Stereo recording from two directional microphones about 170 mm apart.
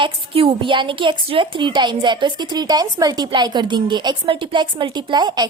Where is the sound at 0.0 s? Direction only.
30° right (ahead or behind).